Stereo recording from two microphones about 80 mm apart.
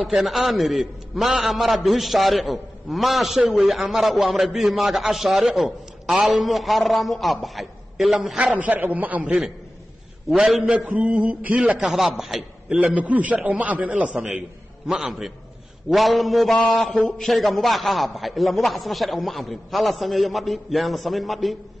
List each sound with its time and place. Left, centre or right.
0.0 s a man's voice: centre
8.5 s a man's voice: right
10.3 s a man's voice: centre
10.6 s a man's voice: centre
11.8 s a man's voice: centre
12.6 s a man's voice: centre
14.9 s a man's voice: centre